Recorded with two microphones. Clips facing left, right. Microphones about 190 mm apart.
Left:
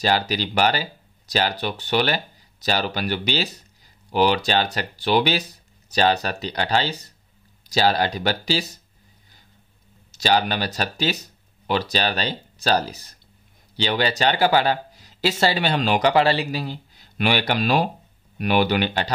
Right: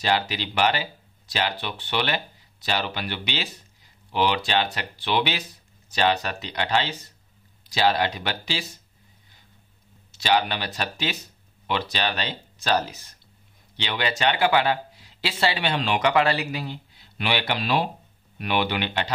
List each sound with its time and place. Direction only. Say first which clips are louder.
0.0 s speech: left 3 dB; 40° left (ahead or behind)
10.1 s speech: left 2 dB; 40° left (ahead or behind)